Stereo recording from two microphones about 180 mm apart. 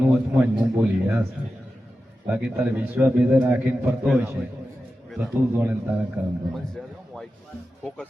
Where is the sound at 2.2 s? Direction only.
10° right (ahead or behind).